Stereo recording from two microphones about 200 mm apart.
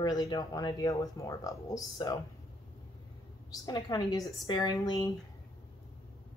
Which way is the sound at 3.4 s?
20° left (ahead or behind).